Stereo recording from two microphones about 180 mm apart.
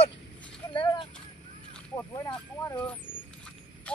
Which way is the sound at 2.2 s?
25° left (ahead or behind).